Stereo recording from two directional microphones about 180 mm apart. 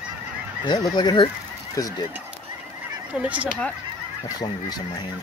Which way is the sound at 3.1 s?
5° right (ahead or behind).